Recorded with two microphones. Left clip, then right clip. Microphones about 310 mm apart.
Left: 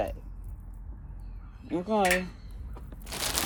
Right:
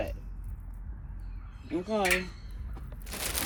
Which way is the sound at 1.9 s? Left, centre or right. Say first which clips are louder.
Left 3 dB; left.